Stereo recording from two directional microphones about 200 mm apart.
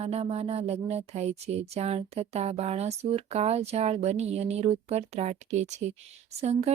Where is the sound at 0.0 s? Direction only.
30° right (ahead or behind).